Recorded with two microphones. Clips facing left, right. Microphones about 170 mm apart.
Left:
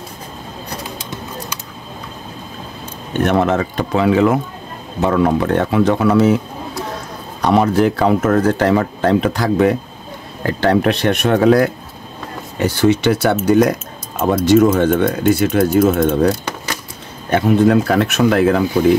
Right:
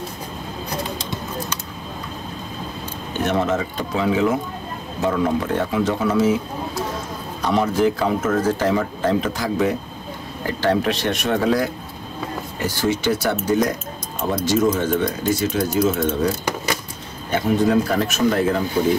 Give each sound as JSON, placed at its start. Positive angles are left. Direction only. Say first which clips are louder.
{"t": 3.1, "sound": "speech", "louder": "left 5 dB", "side_deg": 60}
{"t": 7.4, "sound": "speech", "louder": "left 5 dB", "side_deg": 65}